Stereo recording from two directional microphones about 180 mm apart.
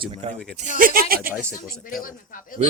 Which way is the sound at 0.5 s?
45° right (ahead or behind).